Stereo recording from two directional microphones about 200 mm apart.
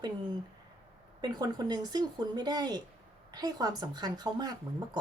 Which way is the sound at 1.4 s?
20° right (ahead or behind).